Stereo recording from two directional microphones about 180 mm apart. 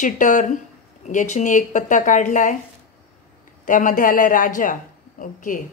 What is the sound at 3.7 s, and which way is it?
Speech, 45° left (ahead or behind).